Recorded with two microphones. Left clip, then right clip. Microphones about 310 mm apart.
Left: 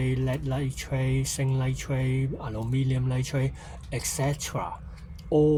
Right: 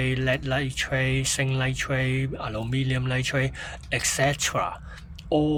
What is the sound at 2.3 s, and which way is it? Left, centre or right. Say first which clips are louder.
Speech: right 3 dB; right.